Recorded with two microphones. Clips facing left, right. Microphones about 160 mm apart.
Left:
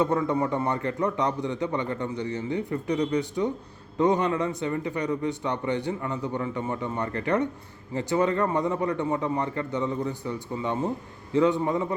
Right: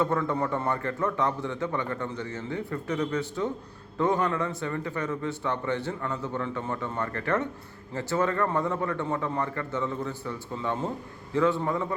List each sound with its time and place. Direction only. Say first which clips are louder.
0.0 s a man's voice: left 2 dB; 20° left (ahead or behind)